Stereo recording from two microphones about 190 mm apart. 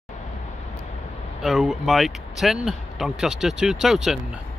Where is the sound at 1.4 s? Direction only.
Centre (ahead or behind).